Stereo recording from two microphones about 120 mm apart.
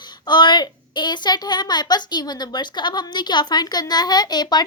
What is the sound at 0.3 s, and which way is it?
A woman's voice, 40° left (ahead or behind).